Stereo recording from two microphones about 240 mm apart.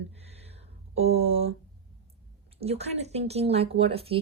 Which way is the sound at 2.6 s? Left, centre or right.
Right.